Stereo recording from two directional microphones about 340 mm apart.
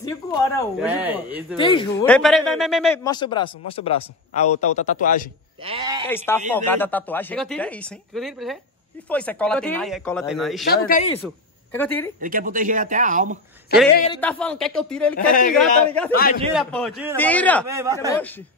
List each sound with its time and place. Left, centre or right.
0.0 s speech: centre
0.7 s speech: centre
1.6 s a man's voice: centre
5.6 s speech: centre
6.0 s a man's voice: centre
10.7 s speech: left
11.2 s speech: centre
12.2 s speech: right
13.7 s speech: left
14.1 s speech: centre
15.1 s speech: left
15.5 s speech: centre
17.6 s a man's voice: centre
17.9 s a man's voice: centre